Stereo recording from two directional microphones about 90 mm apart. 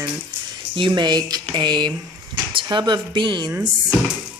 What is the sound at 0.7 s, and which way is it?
Speech, 60° right (ahead or behind).